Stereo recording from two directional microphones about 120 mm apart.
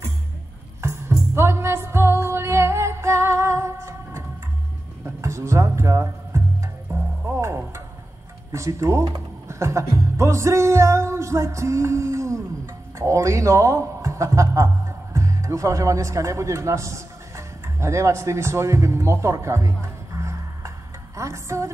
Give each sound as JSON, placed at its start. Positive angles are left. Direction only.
{"t": 0.7, "sound": "music", "side_deg": -20}
{"t": 8.5, "sound": "speech", "side_deg": -25}
{"t": 21.2, "sound": "music", "side_deg": -25}